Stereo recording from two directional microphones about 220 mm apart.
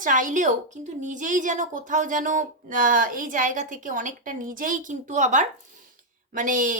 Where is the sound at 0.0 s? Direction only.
35° right (ahead or behind).